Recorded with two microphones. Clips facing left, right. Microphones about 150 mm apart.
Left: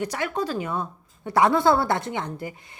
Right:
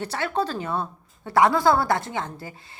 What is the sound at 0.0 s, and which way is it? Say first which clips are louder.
A woman's voice: right 1 dB; 15° left (ahead or behind).